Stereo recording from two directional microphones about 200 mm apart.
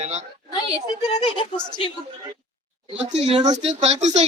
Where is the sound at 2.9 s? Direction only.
30° right (ahead or behind).